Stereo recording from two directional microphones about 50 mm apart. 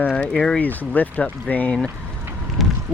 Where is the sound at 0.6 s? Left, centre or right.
Left.